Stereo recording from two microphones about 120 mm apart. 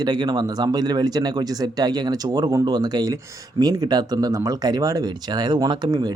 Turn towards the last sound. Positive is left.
turn(degrees=-35)  # may be behind; listen again after turning